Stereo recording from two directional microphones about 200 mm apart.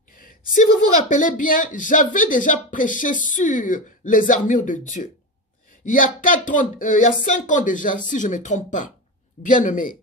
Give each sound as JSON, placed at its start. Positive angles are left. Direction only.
{"t": 0.2, "sound": "speech", "side_deg": 40}